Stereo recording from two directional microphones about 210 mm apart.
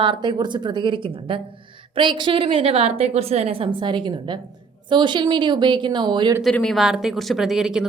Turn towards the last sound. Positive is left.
turn(degrees=0)  # may be behind; listen again after turning